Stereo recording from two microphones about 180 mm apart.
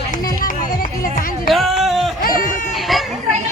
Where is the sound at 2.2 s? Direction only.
50° left (ahead or behind).